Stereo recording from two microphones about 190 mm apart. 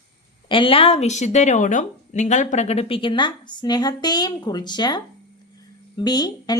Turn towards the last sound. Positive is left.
turn(degrees=20)  # may be behind; listen again after turning